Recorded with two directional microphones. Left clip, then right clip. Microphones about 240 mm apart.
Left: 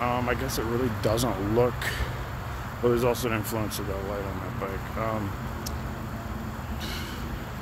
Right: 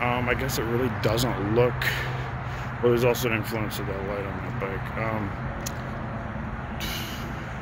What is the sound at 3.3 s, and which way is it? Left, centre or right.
Speech, centre.